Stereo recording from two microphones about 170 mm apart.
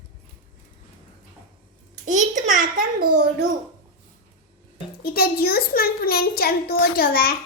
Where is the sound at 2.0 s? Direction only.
50° right (ahead or behind).